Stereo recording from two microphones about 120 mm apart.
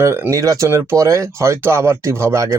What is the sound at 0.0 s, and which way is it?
A man's voice, 20° right (ahead or behind).